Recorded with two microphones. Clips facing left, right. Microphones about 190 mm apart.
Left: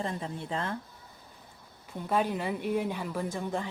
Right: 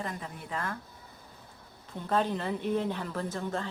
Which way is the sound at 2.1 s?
10° left (ahead or behind).